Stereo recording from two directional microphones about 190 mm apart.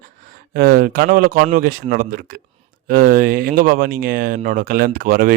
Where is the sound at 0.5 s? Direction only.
55° right (ahead or behind).